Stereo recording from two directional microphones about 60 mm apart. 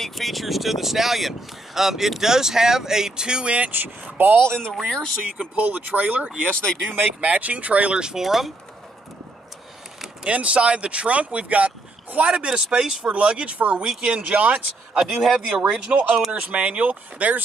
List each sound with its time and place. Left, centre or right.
0.0 s speech: centre; by 4.5 s right
4.5 s speech: centre
5.6 s speech: right
6.5 s speech: centre
6.8 s speech: centre
10.2 s speech: right
12.3 s speech: centre
15.0 s speech: centre
16.3 s speech: right